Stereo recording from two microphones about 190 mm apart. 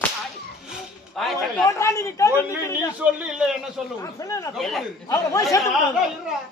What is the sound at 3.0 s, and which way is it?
Speech, 5° right (ahead or behind).